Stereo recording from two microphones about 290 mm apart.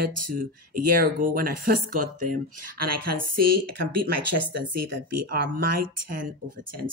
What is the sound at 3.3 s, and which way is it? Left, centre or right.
Speech, right.